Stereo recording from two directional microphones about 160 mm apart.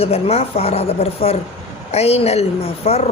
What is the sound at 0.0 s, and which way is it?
Speech, 40° left (ahead or behind).